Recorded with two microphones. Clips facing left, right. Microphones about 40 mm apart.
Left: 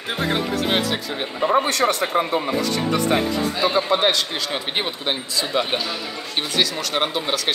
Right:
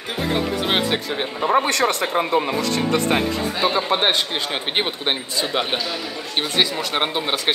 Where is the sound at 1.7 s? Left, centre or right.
Right.